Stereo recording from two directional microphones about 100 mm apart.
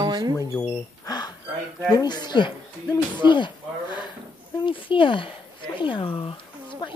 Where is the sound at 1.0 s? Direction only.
45° left (ahead or behind).